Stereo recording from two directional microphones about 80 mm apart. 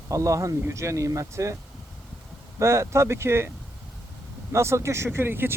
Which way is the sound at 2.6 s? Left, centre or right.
Right.